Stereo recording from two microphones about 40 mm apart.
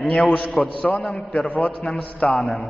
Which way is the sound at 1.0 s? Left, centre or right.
Centre.